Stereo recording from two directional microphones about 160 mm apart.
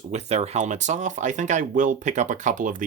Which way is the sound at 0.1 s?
45° right (ahead or behind).